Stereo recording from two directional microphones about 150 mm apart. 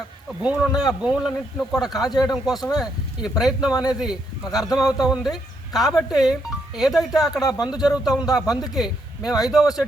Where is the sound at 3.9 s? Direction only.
5° right (ahead or behind).